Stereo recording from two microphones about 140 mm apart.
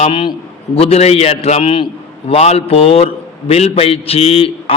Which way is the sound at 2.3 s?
50° left (ahead or behind).